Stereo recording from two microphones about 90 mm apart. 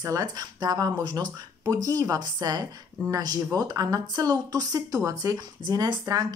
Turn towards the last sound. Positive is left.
turn(degrees=-50)  # may be behind; listen again after turning